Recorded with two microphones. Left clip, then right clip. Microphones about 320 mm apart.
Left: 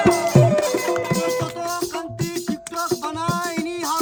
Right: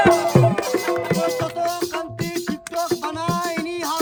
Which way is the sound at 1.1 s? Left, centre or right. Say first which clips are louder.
Right 1 dB; centre.